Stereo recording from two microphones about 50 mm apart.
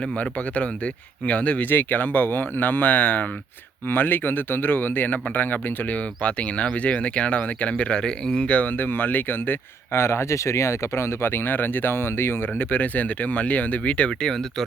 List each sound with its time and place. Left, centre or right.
0.2 s speech: left
6.2 s speech: left
8.4 s speech: left
9.9 s speech: left
11.3 s speech: left
12.7 s speech: left